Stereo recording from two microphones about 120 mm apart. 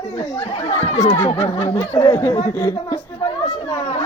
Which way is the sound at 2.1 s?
20° left (ahead or behind).